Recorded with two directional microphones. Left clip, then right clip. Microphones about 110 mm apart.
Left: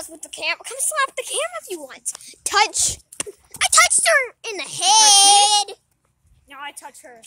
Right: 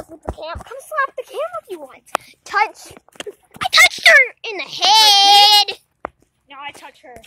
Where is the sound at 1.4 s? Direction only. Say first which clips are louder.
Right 5 dB; 50° left (ahead or behind).